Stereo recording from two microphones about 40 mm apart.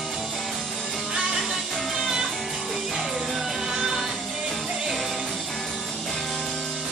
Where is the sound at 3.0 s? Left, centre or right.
Centre.